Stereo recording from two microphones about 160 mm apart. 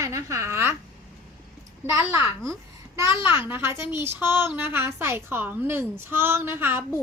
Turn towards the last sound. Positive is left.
turn(degrees=-15)  # may be behind; listen again after turning